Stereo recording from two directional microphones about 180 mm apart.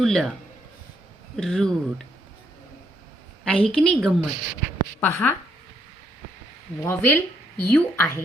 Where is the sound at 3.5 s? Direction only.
5° left (ahead or behind).